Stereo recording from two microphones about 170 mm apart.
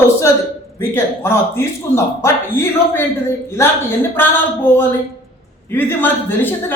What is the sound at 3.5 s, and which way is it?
Speech, 15° left (ahead or behind).